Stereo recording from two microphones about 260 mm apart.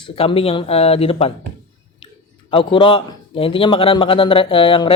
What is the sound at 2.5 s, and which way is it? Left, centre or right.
A man's voice, centre.